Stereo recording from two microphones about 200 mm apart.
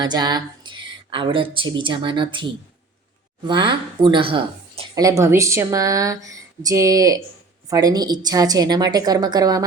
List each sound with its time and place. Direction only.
0.0 s a woman's voice: 20° right (ahead or behind)